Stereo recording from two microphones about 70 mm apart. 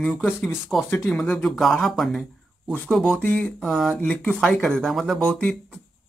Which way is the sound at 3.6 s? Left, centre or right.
Centre.